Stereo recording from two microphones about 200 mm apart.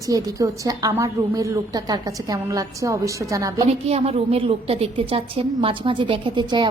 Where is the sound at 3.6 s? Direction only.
30° right (ahead or behind).